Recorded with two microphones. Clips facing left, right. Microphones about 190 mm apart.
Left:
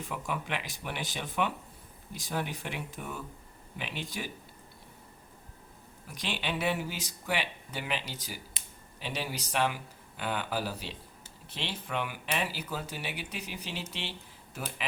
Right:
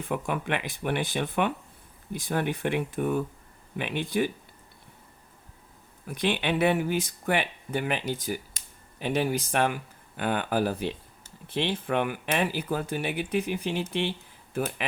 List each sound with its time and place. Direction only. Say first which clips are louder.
0.1 s speech: right 7 dB; 55° right (ahead or behind)
6.1 s speech: right 9 dB; 55° right (ahead or behind)